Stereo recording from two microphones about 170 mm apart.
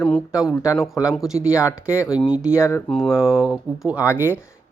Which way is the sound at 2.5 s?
15° left (ahead or behind).